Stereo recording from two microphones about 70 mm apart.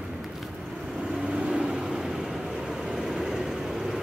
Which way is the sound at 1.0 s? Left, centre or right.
Centre.